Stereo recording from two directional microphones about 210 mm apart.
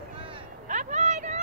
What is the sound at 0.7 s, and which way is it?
Vehicle, 35° right (ahead or behind).